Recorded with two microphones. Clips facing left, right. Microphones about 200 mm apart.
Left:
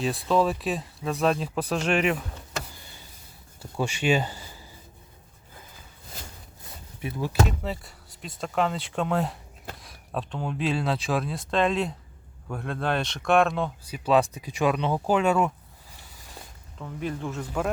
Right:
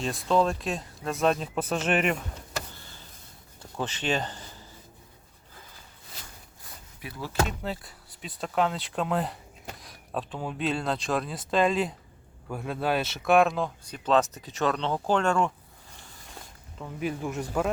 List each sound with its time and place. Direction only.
0.3 s speech: centre (ahead or behind)
2.7 s a sound: 15° left (ahead or behind)
3.6 s speech: 10° left (ahead or behind)
7.0 s speech: 25° left (ahead or behind)
7.4 s speech: centre (ahead or behind)
16.7 s speech: 5° right (ahead or behind)